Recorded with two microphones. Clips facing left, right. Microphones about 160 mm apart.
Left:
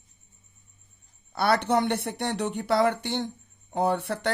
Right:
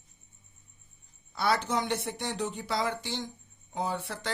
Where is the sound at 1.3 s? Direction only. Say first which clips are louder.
Left 5 dB; 60° left (ahead or behind).